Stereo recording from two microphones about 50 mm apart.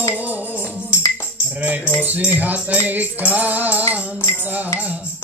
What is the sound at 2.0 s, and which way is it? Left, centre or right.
Music, right.